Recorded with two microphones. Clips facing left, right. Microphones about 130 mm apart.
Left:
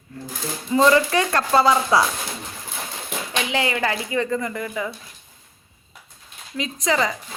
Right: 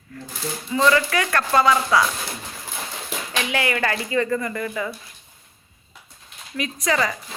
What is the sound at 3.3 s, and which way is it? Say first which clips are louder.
Speech: even; 20° left (ahead or behind).